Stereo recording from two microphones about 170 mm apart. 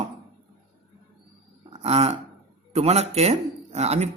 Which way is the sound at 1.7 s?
35° right (ahead or behind).